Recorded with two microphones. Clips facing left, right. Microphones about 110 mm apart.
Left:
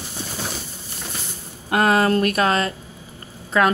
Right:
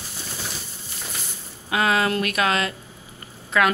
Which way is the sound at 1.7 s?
45° left (ahead or behind).